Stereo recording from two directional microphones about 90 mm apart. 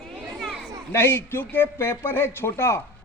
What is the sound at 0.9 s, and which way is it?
Speech, 25° left (ahead or behind).